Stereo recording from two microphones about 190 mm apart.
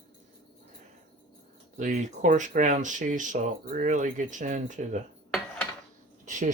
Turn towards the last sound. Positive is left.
turn(degrees=-40)  # may be behind; listen again after turning